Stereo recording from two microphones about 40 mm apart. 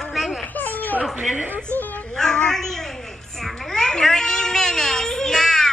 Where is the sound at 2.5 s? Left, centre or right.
Centre.